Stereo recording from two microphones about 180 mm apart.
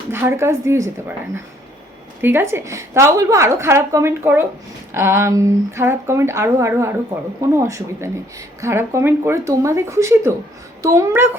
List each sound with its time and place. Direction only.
0.1 s a woman's voice: 15° right (ahead or behind)
2.2 s a woman's voice: 15° right (ahead or behind)